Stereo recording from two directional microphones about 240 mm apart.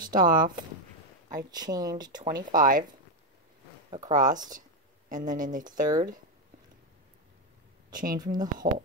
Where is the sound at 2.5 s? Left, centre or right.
Right.